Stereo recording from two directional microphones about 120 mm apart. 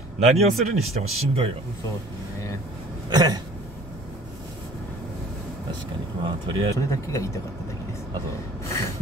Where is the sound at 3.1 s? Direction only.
35° right (ahead or behind).